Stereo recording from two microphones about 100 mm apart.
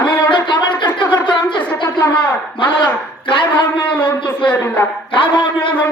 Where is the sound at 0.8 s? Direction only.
20° left (ahead or behind).